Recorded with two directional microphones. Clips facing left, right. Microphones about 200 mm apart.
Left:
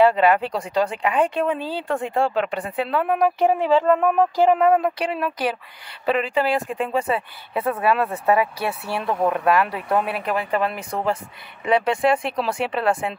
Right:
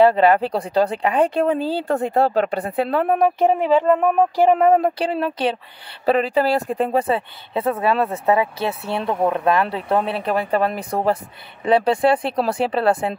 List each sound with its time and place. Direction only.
0.0 s speech: 30° right (ahead or behind)
3.7 s a sound: 15° right (ahead or behind)
4.6 s a woman's voice: 30° right (ahead or behind)